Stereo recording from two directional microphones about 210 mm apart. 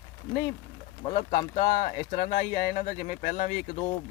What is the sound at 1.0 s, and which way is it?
Speech, 40° left (ahead or behind).